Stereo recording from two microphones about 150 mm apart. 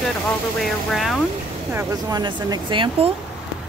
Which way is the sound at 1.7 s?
15° right (ahead or behind).